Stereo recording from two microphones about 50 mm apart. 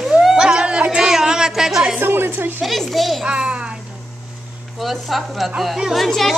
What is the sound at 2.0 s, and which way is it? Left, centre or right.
Speech, right.